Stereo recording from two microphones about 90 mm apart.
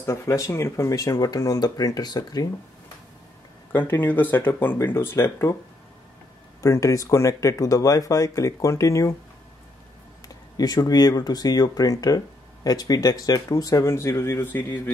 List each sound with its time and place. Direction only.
0.0 s speech: 35° left (ahead or behind)
3.7 s speech: 25° left (ahead or behind)
6.6 s speech: 35° left (ahead or behind)
10.2 s speech: 45° left (ahead or behind); by 14.8 s 20° left (ahead or behind)